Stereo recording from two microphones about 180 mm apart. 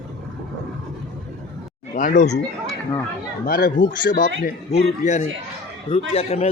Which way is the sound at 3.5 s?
50° left (ahead or behind).